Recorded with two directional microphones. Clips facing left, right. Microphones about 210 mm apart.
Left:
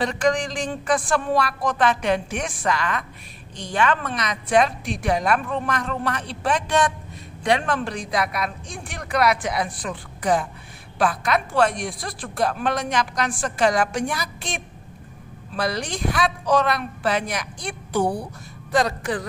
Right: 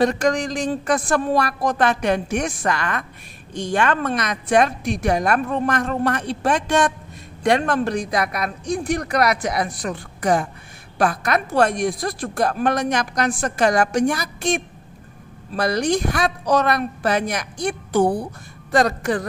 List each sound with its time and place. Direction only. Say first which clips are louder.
0.0 s a woman's voice: right 3 dB; 40° right (ahead or behind)